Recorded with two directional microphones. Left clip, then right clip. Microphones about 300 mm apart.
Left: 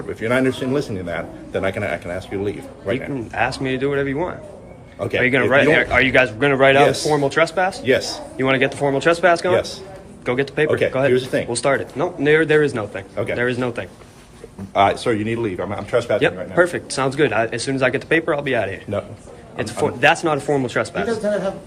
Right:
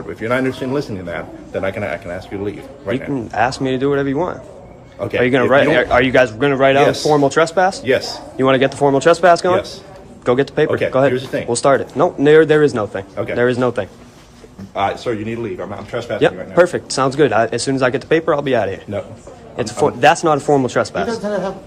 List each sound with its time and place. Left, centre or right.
0.2 s a man's voice: centre
9.5 s a man's voice: centre
10.2 s a man's voice: centre
11.5 s a man's voice: centre
14.7 s a man's voice: left
15.9 s speech: centre
16.2 s a man's voice: centre